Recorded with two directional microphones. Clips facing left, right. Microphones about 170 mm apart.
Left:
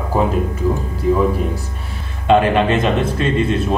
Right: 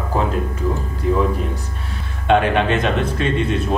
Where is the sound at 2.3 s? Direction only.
Centre (ahead or behind).